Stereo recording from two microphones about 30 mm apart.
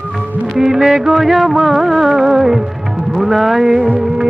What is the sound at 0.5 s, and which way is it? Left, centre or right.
Music, centre.